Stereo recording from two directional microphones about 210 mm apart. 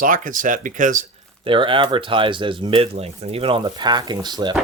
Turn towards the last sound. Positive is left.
turn(degrees=-20)  # may be behind; listen again after turning